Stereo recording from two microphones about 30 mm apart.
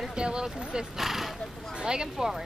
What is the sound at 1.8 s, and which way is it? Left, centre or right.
Speech, right.